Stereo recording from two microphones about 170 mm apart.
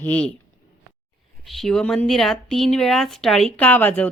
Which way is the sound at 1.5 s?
Centre (ahead or behind).